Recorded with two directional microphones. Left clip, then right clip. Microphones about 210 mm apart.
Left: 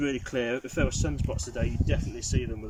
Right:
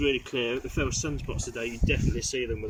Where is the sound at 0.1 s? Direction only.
65° left (ahead or behind).